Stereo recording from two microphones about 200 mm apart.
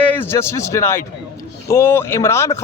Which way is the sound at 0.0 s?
10° left (ahead or behind).